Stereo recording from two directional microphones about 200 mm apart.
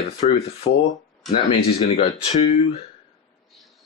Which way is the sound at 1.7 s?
30° left (ahead or behind).